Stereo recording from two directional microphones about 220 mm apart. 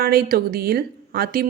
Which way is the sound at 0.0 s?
45° right (ahead or behind).